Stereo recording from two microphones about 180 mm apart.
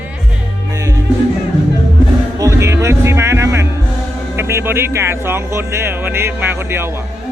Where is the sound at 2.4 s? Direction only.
15° right (ahead or behind).